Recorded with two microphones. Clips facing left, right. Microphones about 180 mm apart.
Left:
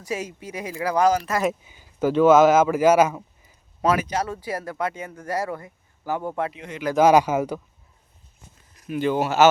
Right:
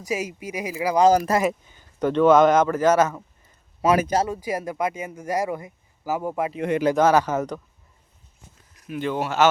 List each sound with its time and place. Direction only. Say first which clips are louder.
0.0 s speech: right 2 dB; 10° right (ahead or behind)
1.3 s speech: right 4 dB; 35° right (ahead or behind)
1.6 s speech: left 1 dB; 10° left (ahead or behind)
3.9 s speech: right 4 dB; 40° right (ahead or behind)
4.2 s speech: right 3 dB; 15° right (ahead or behind)
6.6 s speech: right 13 dB; 55° right (ahead or behind)
6.9 s speech: left 6 dB; 10° left (ahead or behind)
8.9 s speech: left 3 dB; centre (ahead or behind)